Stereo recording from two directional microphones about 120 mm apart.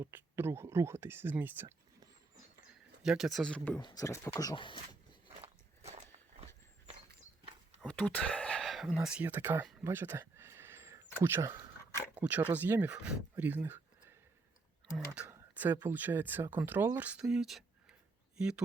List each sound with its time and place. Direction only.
0.0 s speech: 20° right (ahead or behind)
3.0 s speech: 5° right (ahead or behind)
3.8 s speech: 40° left (ahead or behind)
4.0 s speech: 25° left (ahead or behind)
4.5 s speech: 45° left (ahead or behind)
5.4 s walk: 65° right (ahead or behind)
7.9 s speech: 10° left (ahead or behind); by 9.6 s 15° right (ahead or behind)
9.8 s a sound: 20° right (ahead or behind)
12.3 s speech: 15° right (ahead or behind)
14.9 s speech: 10° right (ahead or behind)